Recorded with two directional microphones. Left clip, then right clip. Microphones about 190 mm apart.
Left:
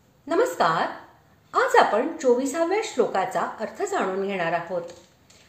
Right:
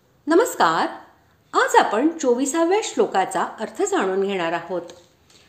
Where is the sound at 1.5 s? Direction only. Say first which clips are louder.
Right 2 dB; 35° right (ahead or behind).